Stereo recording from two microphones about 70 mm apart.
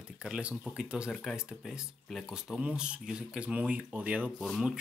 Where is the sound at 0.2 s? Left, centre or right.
Centre.